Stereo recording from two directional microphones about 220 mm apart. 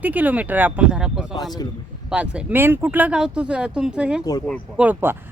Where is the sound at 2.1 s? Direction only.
5° right (ahead or behind).